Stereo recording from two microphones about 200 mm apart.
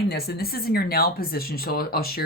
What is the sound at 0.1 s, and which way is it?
Speech, 50° left (ahead or behind).